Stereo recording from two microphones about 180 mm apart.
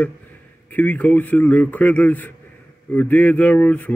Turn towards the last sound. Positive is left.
turn(degrees=10)  # may be behind; listen again after turning